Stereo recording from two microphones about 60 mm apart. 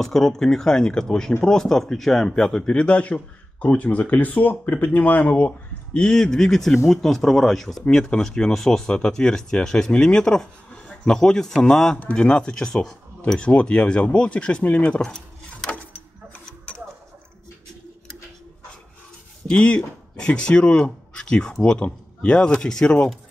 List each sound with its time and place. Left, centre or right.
0.0 s speech: centre; by 5.5 s left
5.9 s speech: centre
15.0 s a sound: centre
19.4 s speech: centre